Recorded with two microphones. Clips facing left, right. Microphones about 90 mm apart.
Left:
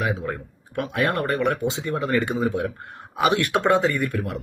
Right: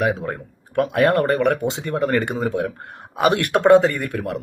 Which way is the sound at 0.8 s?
50° right (ahead or behind).